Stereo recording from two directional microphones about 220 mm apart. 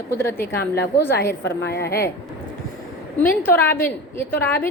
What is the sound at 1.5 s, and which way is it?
Speech, 45° left (ahead or behind).